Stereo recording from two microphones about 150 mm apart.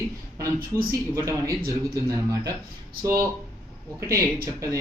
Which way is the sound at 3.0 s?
20° right (ahead or behind).